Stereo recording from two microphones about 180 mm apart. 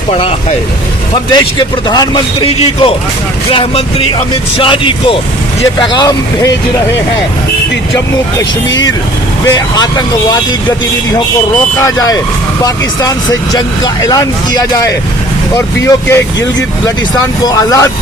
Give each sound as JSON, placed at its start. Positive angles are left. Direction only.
{"t": 0.1, "sound": "speech", "side_deg": 30}
{"t": 9.5, "sound": "speech", "side_deg": 25}
{"t": 11.8, "sound": "speech", "side_deg": 20}
{"t": 17.4, "sound": "speech", "side_deg": 20}